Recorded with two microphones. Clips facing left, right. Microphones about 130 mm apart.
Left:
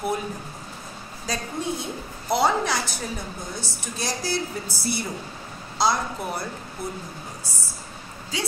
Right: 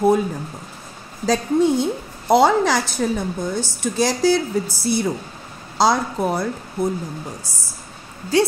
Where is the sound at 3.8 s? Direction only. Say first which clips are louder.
Right 13 dB; 90° right.